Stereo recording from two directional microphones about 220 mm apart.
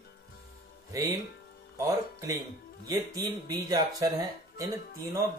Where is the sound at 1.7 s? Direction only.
15° right (ahead or behind).